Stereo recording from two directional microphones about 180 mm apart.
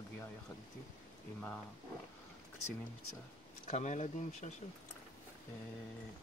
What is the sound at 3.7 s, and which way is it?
Speech, 40° left (ahead or behind).